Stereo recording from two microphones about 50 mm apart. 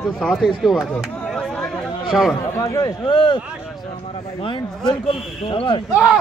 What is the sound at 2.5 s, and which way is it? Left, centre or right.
Speech, left.